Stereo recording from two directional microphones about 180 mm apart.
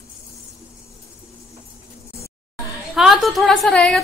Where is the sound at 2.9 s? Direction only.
Centre (ahead or behind).